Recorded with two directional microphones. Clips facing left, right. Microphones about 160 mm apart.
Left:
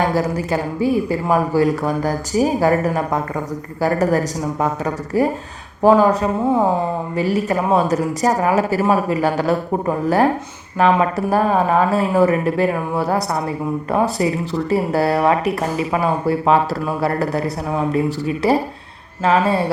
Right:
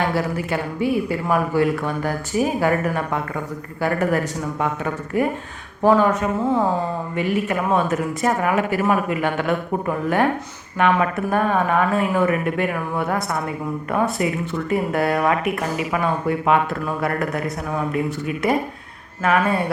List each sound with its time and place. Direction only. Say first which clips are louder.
0.0 s speech: left 3 dB; 40° left (ahead or behind)
6.4 s a woman's voice: left 3 dB; 15° left (ahead or behind)
7.2 s speech: left 3 dB; 35° left (ahead or behind)